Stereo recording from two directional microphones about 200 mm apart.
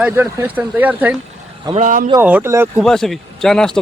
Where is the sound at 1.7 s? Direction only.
40° right (ahead or behind).